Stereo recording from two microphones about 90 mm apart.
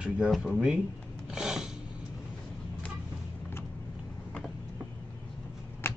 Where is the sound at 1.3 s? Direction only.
5° right (ahead or behind).